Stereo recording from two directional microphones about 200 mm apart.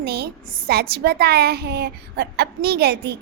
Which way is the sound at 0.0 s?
55° right (ahead or behind).